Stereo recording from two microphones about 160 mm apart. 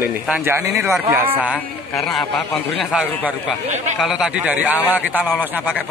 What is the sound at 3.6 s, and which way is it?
Speech, 45° right (ahead or behind).